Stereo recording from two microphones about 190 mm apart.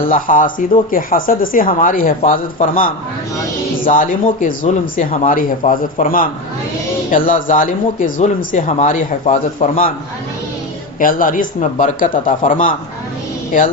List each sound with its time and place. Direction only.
0.1 s speech: 45° left (ahead or behind)
11.0 s speech: 45° left (ahead or behind)